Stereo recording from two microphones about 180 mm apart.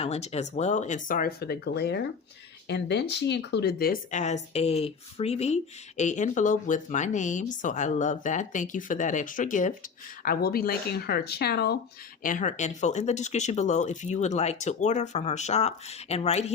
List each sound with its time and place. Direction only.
0.0 s speech: 35° left (ahead or behind)
10.2 s speech: 55° left (ahead or behind)
12.2 s speech: 45° left (ahead or behind)